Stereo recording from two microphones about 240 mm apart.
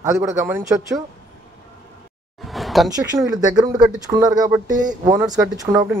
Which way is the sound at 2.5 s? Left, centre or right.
Centre.